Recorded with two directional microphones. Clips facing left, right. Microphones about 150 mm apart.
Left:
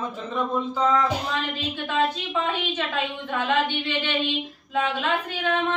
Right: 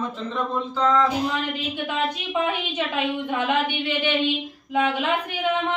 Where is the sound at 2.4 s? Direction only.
15° right (ahead or behind).